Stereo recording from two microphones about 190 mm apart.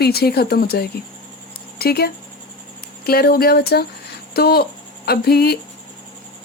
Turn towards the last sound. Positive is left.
turn(degrees=55)  # may be behind; listen again after turning